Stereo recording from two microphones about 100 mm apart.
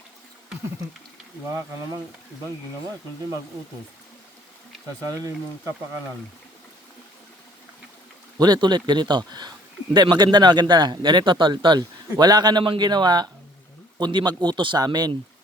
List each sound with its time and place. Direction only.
5.0 s speech: 40° right (ahead or behind)
8.4 s a man's voice: 45° right (ahead or behind)